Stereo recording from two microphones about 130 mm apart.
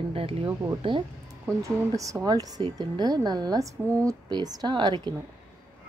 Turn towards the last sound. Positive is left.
turn(degrees=-35)  # may be behind; listen again after turning